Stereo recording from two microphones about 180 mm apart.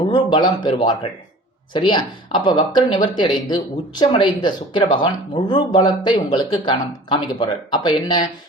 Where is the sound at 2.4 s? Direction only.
25° left (ahead or behind).